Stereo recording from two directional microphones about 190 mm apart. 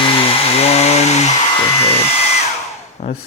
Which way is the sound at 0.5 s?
35° left (ahead or behind).